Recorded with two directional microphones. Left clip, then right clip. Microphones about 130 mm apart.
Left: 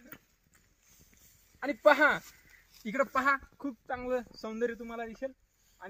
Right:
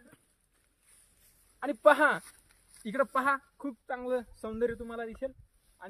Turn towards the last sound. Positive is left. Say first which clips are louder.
# right 1 dB
turn(degrees=-15)  # may be behind; listen again after turning